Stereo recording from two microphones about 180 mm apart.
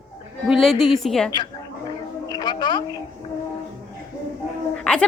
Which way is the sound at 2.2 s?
20° left (ahead or behind).